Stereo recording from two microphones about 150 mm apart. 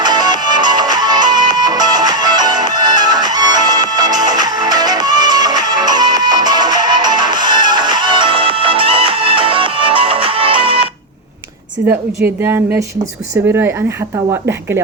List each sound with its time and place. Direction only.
0.0 s music: 30° right (ahead or behind)
12.4 s speech: 15° right (ahead or behind)